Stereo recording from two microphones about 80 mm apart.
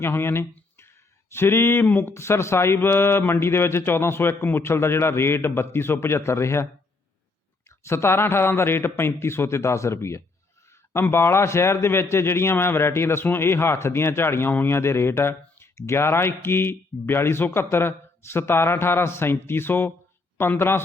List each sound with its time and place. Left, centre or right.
0.0 s speech: left
7.9 s speech: left